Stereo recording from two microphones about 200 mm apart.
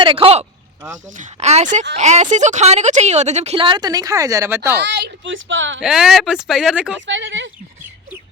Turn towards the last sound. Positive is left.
turn(degrees=-65)  # may be behind; listen again after turning